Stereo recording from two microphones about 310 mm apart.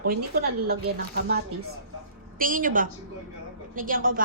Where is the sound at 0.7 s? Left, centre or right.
Right.